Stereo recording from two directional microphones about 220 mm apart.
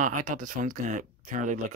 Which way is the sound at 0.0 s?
35° right (ahead or behind).